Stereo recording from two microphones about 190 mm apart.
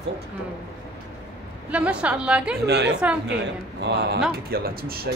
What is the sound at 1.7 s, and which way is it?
Speech, 5° right (ahead or behind).